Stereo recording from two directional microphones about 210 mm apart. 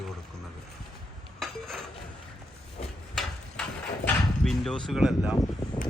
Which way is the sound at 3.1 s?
Centre (ahead or behind).